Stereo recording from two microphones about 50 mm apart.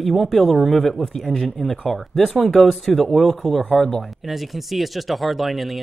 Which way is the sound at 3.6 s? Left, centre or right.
Centre.